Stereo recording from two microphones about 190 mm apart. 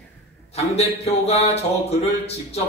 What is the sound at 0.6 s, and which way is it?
Speech, 35° left (ahead or behind).